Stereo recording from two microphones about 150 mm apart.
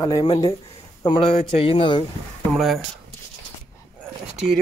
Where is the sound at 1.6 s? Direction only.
35° left (ahead or behind).